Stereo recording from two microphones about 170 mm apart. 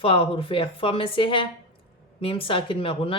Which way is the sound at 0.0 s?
30° left (ahead or behind).